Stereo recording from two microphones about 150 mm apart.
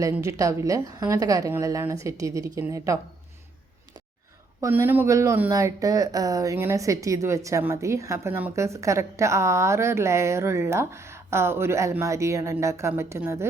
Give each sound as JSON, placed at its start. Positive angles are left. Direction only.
{"t": 0.0, "sound": "speech", "side_deg": -20}
{"t": 4.6, "sound": "speech", "side_deg": -15}